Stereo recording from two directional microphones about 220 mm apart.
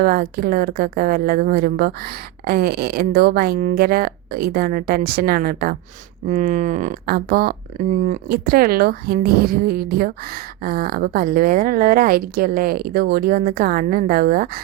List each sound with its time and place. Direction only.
0.0 s a woman's voice: 45° right (ahead or behind)